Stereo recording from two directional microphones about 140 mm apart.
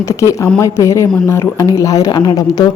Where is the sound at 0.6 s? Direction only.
20° left (ahead or behind).